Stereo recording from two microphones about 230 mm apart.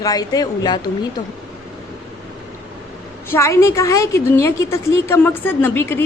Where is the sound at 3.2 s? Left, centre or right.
Centre.